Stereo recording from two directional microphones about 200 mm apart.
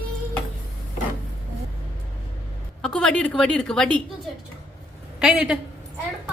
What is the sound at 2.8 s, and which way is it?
A woman's voice, 5° left (ahead or behind).